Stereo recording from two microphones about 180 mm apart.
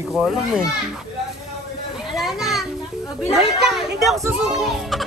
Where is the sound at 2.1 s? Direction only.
Centre (ahead or behind).